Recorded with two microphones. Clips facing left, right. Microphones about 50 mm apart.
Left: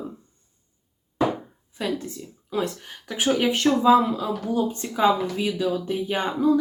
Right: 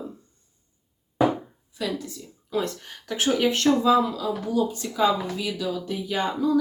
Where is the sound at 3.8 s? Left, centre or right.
Left.